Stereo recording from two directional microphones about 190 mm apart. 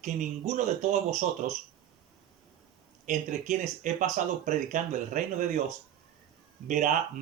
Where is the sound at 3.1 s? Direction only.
40° right (ahead or behind).